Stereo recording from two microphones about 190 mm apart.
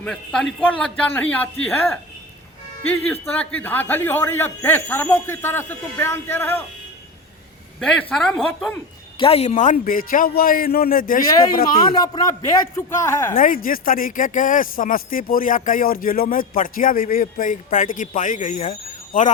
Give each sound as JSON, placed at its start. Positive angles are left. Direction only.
{"t": 0.0, "sound": "speech", "side_deg": 5}
{"t": 2.9, "sound": "a man's voice", "side_deg": 10}
{"t": 7.8, "sound": "speech", "side_deg": 5}
{"t": 9.1, "sound": "speech", "side_deg": 30}
{"t": 11.9, "sound": "a man's voice", "side_deg": 20}
{"t": 13.3, "sound": "speech", "side_deg": 45}